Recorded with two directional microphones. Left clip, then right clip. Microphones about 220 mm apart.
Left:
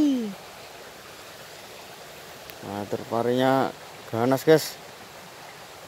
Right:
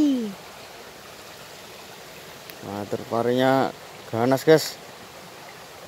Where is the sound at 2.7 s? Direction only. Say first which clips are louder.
Right 1 dB; centre (ahead or behind).